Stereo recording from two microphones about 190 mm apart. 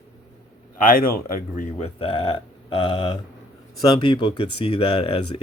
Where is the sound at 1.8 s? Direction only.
30° left (ahead or behind).